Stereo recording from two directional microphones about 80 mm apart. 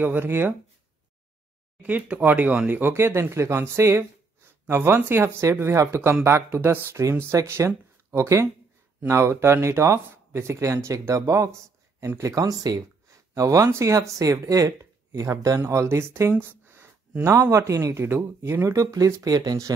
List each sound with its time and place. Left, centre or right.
0.0 s speech: right
1.8 s speech: centre; by 19.7 s right